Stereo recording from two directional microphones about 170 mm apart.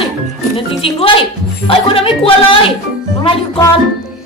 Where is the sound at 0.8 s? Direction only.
30° left (ahead or behind).